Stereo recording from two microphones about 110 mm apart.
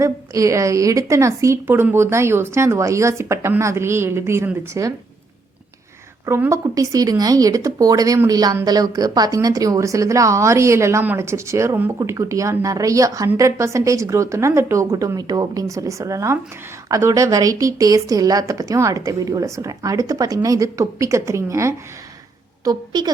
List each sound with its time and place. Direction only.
0.0 s a woman's voice: 30° right (ahead or behind)
6.2 s a woman's voice: 25° right (ahead or behind)
22.6 s a woman's voice: 40° right (ahead or behind)